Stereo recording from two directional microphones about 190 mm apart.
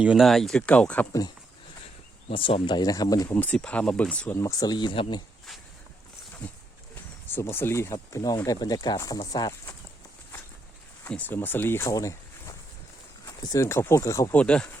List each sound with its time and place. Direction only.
0.0 s speech: 5° right (ahead or behind)
2.3 s speech: 30° left (ahead or behind)
3.3 s speech: 5° left (ahead or behind); by 5.2 s 25° left (ahead or behind)
6.9 s speech: 10° left (ahead or behind)
11.0 s speech: 10° left (ahead or behind)
14.4 s speech: 5° left (ahead or behind)